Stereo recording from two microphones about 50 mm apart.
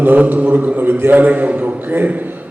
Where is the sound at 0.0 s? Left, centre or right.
Right.